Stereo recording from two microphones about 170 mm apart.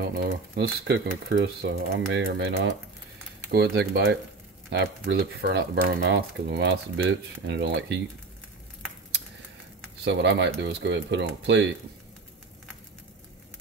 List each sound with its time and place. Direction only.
0.0 s speech: 80° right
3.5 s speech: 75° right (ahead or behind)
4.6 s speech: 65° right (ahead or behind)
10.0 s speech: 90° right